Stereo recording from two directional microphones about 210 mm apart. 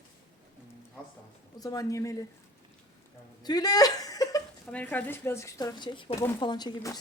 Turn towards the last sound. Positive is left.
turn(degrees=20)  # may be behind; listen again after turning